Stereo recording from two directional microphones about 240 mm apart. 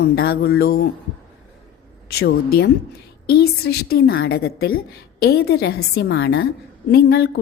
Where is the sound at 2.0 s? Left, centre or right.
Left.